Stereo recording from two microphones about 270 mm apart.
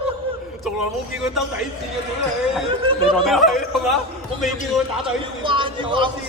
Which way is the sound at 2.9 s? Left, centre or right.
Centre.